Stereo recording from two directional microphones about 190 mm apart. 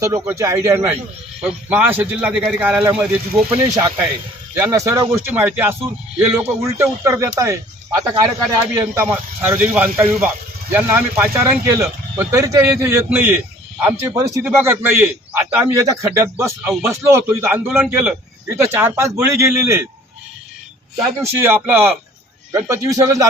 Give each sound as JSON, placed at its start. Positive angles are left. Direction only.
{"t": 0.0, "sound": "speech", "side_deg": -15}
{"t": 21.2, "sound": "speech", "side_deg": -10}